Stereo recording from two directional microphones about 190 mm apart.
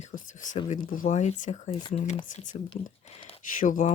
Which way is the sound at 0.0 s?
40° left (ahead or behind).